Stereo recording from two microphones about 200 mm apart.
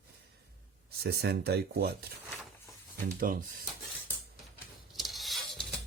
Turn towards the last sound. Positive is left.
turn(degrees=0)  # may be behind; listen again after turning